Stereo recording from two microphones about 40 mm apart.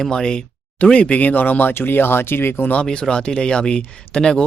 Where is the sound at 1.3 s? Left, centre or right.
Left.